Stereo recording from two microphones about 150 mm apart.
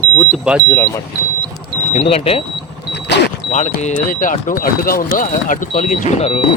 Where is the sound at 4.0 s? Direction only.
65° left (ahead or behind); by 6.6 s 40° left (ahead or behind).